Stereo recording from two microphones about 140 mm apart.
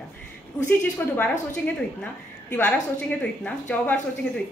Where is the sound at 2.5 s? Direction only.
10° left (ahead or behind).